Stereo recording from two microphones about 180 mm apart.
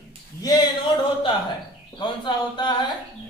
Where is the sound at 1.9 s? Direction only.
25° left (ahead or behind).